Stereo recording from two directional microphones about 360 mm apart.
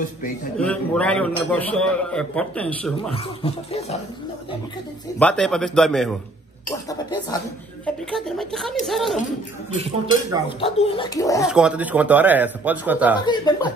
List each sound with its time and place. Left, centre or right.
0.7 s a man's voice: centre
3.4 s speech: centre
5.2 s a man's voice: centre
9.8 s speech: centre
10.6 s speech: centre
11.4 s a man's voice: centre
13.2 s speech: centre